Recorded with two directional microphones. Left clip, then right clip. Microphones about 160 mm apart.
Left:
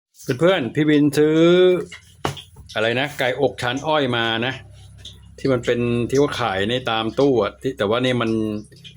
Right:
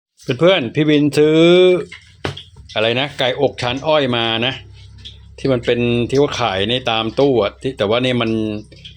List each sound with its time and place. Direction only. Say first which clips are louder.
0.3 s speech: right 4 dB; 15° right (ahead or behind)